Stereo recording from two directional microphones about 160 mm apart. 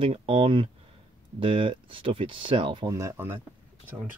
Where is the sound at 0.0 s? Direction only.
35° right (ahead or behind).